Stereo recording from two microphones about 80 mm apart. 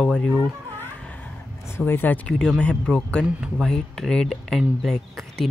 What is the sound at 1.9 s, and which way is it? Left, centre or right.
Speech, left.